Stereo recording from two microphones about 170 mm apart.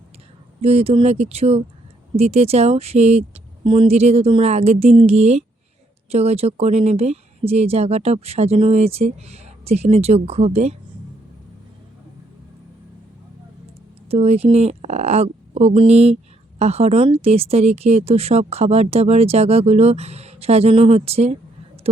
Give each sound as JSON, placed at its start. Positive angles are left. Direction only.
{"t": 0.6, "sound": "speech", "side_deg": -35}
{"t": 14.1, "sound": "speech", "side_deg": -35}